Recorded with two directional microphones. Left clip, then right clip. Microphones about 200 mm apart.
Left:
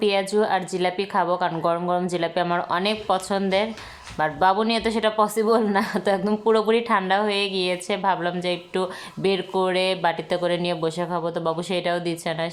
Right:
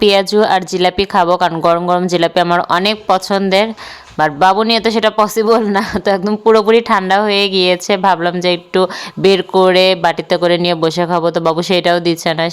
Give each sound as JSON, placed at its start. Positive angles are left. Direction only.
{"t": 0.0, "sound": "speech", "side_deg": -45}